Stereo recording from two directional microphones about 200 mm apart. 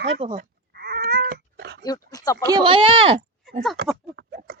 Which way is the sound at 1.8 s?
20° left (ahead or behind).